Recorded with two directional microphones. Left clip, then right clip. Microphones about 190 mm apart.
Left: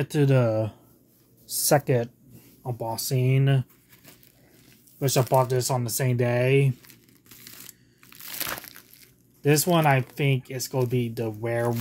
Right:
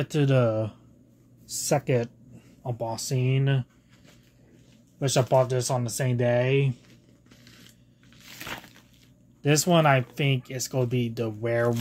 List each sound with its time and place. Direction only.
0.0 s speech: 5° left (ahead or behind)
4.9 s speech: 5° left (ahead or behind)
6.8 s crumpling: 65° left (ahead or behind)
9.4 s speech: centre (ahead or behind)